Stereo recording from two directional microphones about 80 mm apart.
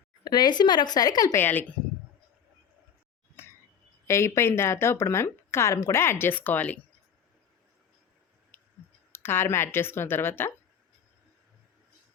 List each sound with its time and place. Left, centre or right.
0.3 s a woman's voice: left
1.4 s speech: left
3.4 s a sound: left
4.0 s speech: left
8.5 s a sound: left
9.1 s speech: left